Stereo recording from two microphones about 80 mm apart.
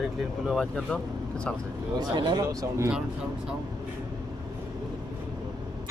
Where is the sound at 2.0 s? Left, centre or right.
Right.